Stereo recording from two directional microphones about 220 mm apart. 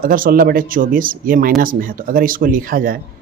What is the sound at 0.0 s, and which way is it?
Speech, 40° right (ahead or behind).